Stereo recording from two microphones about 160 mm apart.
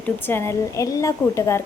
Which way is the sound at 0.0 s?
15° left (ahead or behind).